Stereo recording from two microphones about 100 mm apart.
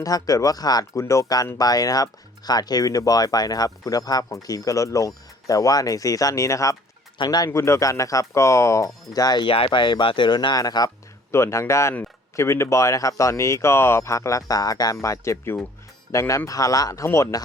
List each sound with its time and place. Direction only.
0.0 s speech: 35° left (ahead or behind)
9.5 s speech: 60° left (ahead or behind); by 10.9 s 40° left (ahead or behind)
11.3 s speech: 30° left (ahead or behind)